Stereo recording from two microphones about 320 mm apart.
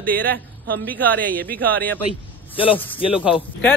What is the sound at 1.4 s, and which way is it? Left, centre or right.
Speech, right.